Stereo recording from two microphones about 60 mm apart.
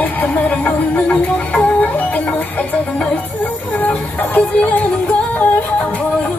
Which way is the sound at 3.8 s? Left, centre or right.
Left.